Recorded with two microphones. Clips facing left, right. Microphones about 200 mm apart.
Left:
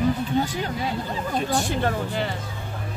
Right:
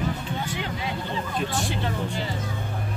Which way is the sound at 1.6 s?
45° left (ahead or behind).